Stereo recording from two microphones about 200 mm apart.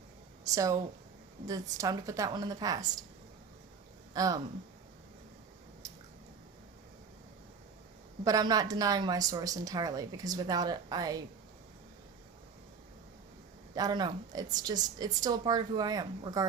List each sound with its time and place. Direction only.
0.4 s a woman's voice: 15° right (ahead or behind)
1.8 s a woman's voice: 15° right (ahead or behind)
4.1 s a woman's voice: 20° right (ahead or behind)
5.8 s squish: 15° right (ahead or behind)
8.2 s a woman's voice: 20° right (ahead or behind)
13.7 s a woman's voice: 20° right (ahead or behind)